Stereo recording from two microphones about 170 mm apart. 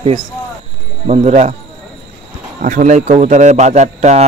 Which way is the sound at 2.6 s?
50° right (ahead or behind).